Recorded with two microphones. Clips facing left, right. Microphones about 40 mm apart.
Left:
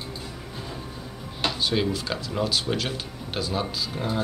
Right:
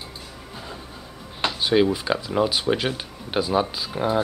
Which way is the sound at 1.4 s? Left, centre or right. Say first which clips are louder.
Right 5 dB; centre.